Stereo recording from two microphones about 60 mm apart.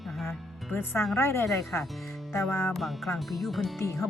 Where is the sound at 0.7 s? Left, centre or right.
Left.